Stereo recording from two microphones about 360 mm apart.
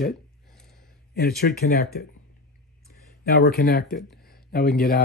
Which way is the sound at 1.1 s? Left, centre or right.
Left.